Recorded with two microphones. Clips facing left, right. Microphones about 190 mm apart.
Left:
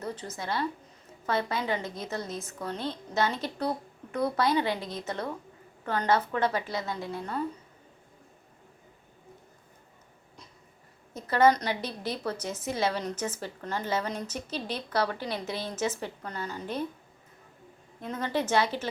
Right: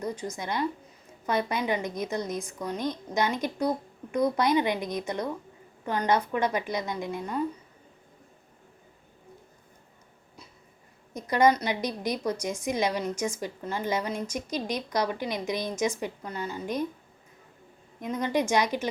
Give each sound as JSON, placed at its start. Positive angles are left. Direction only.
{"t": 0.0, "sound": "a woman's voice", "side_deg": -15}
{"t": 11.1, "sound": "a woman's voice", "side_deg": -15}
{"t": 18.0, "sound": "a woman's voice", "side_deg": -15}